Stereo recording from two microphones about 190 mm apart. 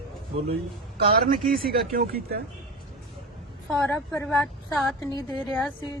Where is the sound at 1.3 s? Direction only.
50° right (ahead or behind).